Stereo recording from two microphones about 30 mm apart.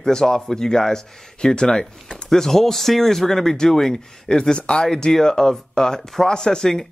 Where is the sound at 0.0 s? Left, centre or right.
Centre.